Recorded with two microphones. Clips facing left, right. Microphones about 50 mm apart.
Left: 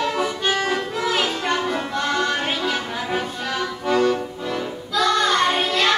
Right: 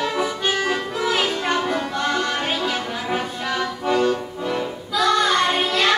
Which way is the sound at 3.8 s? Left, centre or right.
Centre.